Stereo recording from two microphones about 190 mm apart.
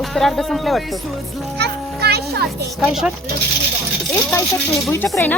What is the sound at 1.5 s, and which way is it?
Speech, 60° right (ahead or behind).